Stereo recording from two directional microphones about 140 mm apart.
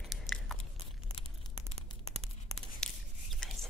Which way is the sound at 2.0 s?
45° right (ahead or behind).